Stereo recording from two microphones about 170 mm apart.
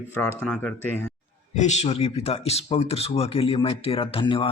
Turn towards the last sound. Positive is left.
turn(degrees=30)  # may be behind; listen again after turning